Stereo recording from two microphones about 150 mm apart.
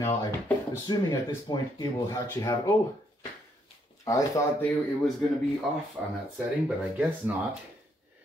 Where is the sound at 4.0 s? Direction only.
20° left (ahead or behind).